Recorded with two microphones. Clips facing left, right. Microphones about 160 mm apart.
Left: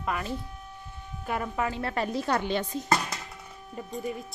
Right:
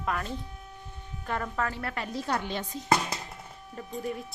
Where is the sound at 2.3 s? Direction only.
65° left (ahead or behind).